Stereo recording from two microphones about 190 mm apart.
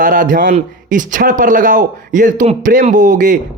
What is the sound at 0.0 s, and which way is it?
Speech, 45° right (ahead or behind).